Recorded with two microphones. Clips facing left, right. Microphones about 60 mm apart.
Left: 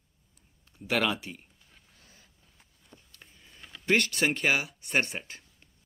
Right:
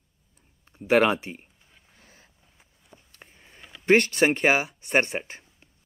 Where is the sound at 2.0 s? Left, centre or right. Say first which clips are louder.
Right 4 dB; right.